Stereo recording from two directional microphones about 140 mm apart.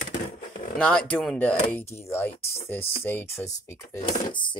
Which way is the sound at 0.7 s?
5° left (ahead or behind).